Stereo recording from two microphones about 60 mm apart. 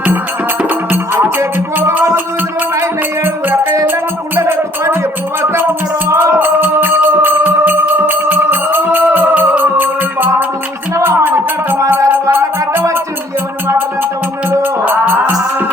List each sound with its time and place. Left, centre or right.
0.9 s music: right
6.1 s music: right
14.6 s music: right